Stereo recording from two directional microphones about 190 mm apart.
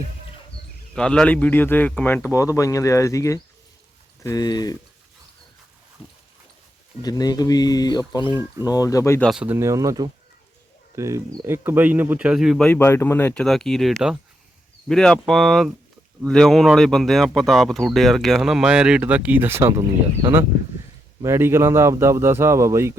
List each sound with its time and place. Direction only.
0.9 s speech: 5° left (ahead or behind); by 4.8 s 20° left (ahead or behind)
7.0 s speech: 20° left (ahead or behind)
9.3 s a man's voice: 10° right (ahead or behind)
21.2 s a man's voice: 15° right (ahead or behind)